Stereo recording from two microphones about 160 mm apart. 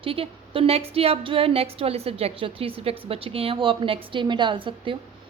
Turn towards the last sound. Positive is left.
turn(degrees=-30)  # may be behind; listen again after turning